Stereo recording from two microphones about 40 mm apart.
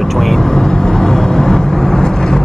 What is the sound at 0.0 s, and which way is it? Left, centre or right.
Vehicle, centre.